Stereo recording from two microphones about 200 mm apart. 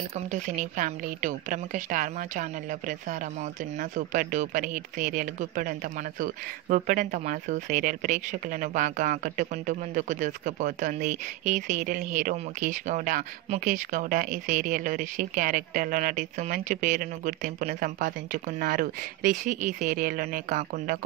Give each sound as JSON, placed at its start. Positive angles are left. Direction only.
{"t": 0.3, "sound": "speech", "side_deg": -40}
{"t": 3.9, "sound": "speech", "side_deg": -40}